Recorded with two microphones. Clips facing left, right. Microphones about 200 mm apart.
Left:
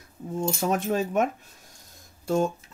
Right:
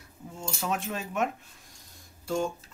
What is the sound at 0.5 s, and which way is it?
Speech, 40° left (ahead or behind).